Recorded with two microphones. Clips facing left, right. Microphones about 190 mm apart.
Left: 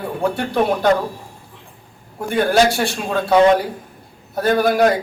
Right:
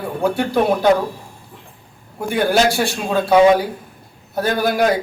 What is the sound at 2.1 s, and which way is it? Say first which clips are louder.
A man's voice: left 1 dB; 5° right (ahead or behind).